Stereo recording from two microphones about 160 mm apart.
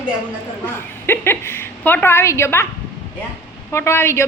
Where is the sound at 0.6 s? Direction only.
15° left (ahead or behind).